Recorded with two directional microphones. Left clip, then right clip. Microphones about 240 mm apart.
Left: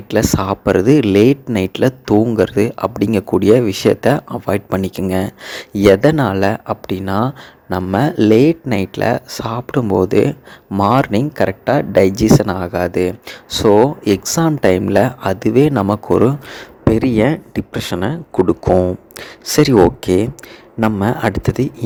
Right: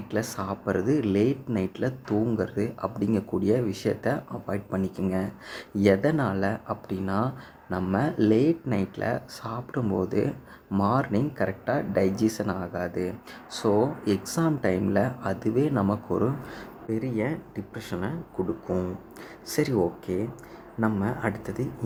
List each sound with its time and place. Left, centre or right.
0.1 s speech: left